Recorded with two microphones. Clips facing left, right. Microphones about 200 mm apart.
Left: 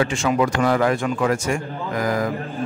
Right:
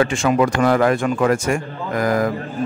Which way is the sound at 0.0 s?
55° right (ahead or behind).